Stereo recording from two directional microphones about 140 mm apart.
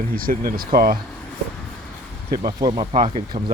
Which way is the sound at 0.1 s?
90° right.